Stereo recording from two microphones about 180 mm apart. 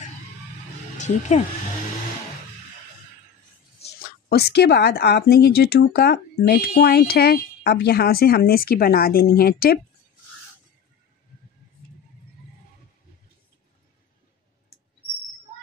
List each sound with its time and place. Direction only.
0.9 s speech: 40° left (ahead or behind)
4.0 s speech: 60° left (ahead or behind)